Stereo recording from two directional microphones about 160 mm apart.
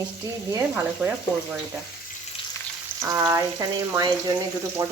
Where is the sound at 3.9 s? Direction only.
25° right (ahead or behind).